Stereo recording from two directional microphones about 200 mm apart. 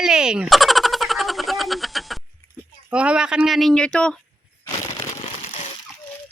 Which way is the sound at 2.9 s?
5° right (ahead or behind).